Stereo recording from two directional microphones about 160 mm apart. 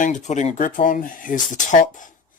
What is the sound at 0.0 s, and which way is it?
Speech, 50° left (ahead or behind).